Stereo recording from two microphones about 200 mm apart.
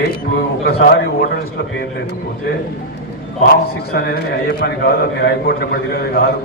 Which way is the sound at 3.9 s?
55° left (ahead or behind).